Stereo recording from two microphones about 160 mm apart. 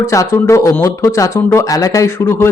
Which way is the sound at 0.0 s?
20° left (ahead or behind).